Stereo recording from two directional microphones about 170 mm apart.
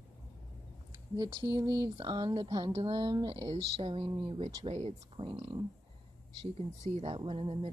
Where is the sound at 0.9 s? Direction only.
25° right (ahead or behind).